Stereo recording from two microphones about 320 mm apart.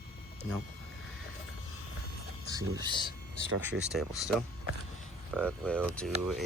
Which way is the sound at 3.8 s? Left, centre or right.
Centre.